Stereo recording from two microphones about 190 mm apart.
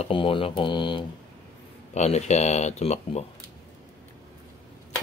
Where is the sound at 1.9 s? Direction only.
35° left (ahead or behind).